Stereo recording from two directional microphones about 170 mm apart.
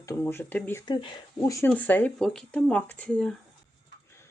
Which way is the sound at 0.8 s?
25° left (ahead or behind).